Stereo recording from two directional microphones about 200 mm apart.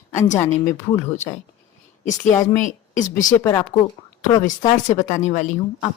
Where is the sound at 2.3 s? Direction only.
15° left (ahead or behind).